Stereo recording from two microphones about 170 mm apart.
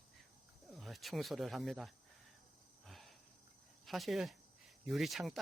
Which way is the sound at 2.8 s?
Centre (ahead or behind).